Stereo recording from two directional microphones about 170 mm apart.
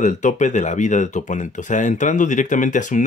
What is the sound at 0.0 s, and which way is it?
Speech, 45° left (ahead or behind).